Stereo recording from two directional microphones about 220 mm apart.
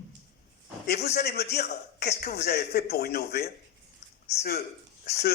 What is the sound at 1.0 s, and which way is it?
Speech, 45° left (ahead or behind).